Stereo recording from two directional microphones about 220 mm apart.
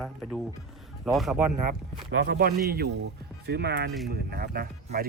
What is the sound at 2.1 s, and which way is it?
Speech, 60° right (ahead or behind).